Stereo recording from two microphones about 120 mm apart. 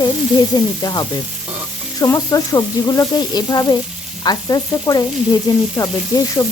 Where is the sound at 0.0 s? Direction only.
35° left (ahead or behind).